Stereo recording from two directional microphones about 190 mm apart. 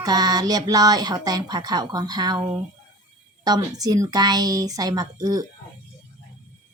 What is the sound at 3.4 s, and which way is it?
A child's voice, 20° right (ahead or behind).